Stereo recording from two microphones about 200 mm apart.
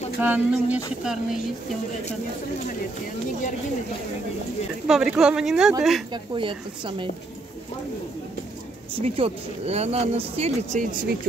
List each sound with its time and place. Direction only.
0.2 s a sound: 5° right (ahead or behind)
4.8 s speech: 5° right (ahead or behind)
6.1 s speech: 25° right (ahead or behind)
9.0 s speech: 30° right (ahead or behind)